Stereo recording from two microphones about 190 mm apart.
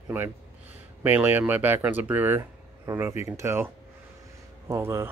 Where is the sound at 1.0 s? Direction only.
10° right (ahead or behind).